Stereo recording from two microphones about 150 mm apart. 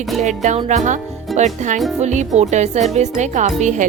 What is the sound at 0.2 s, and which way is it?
Music, 50° right (ahead or behind).